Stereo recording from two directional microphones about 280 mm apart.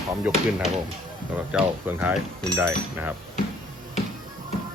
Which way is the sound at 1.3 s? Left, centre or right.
Centre.